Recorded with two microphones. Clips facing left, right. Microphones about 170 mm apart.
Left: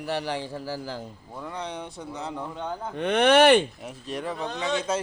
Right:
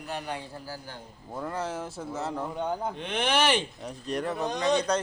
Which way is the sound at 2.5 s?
15° right (ahead or behind).